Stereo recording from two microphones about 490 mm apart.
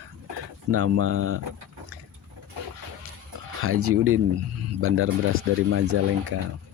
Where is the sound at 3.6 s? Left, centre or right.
Right.